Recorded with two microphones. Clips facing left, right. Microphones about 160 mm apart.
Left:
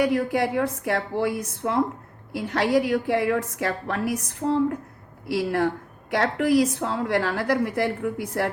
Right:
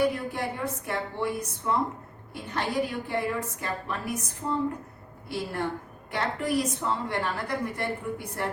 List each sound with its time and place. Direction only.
0.0 s a woman's voice: 90° left